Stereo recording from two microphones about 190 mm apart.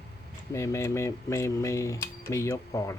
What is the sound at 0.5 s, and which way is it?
Speech, 15° left (ahead or behind).